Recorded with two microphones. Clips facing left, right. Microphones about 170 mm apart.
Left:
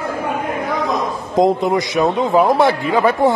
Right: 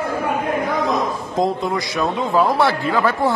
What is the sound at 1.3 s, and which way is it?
A man's voice, 20° left (ahead or behind).